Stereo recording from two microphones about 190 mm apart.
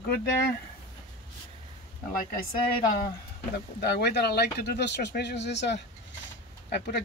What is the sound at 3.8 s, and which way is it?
Speech, 60° left (ahead or behind).